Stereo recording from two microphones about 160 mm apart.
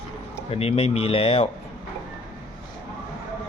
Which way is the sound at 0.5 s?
40° left (ahead or behind).